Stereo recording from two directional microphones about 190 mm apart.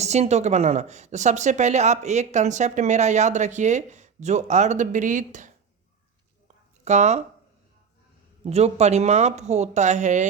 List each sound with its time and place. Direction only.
0.0 s speech: 35° right (ahead or behind)
6.8 s speech: 35° right (ahead or behind)
8.4 s speech: 35° right (ahead or behind)